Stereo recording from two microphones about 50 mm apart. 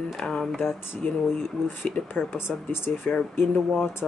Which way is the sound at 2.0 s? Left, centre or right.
Centre.